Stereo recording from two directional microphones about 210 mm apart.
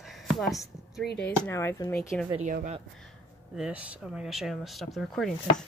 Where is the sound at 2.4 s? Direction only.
35° right (ahead or behind).